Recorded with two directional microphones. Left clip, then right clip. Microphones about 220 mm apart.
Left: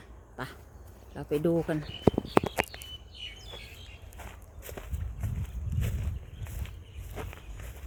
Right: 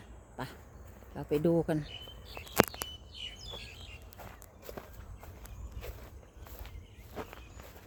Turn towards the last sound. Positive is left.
turn(degrees=-5)  # may be behind; listen again after turning